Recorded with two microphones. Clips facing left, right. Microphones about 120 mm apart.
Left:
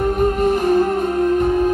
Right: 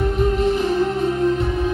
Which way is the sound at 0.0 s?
50° left (ahead or behind).